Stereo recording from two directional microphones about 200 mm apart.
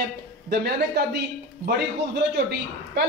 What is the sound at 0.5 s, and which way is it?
Speech, 55° right (ahead or behind).